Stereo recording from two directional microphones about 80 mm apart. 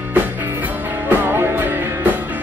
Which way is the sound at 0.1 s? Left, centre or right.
Right.